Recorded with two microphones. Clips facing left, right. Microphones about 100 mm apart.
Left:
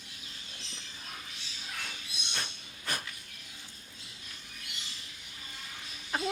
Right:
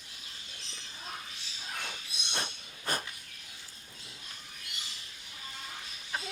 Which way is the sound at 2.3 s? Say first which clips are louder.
Right 3 dB; 35° right (ahead or behind).